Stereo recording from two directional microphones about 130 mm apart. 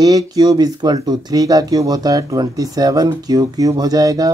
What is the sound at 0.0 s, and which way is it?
Speech, 30° right (ahead or behind).